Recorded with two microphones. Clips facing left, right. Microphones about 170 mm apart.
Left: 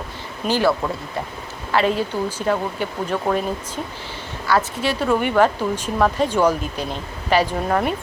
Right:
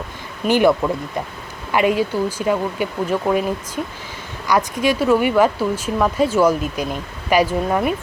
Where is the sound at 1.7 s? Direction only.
10° right (ahead or behind).